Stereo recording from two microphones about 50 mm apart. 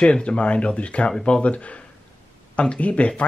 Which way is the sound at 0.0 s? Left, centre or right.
Centre.